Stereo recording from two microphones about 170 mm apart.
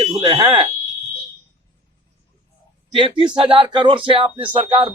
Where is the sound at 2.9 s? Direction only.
30° right (ahead or behind).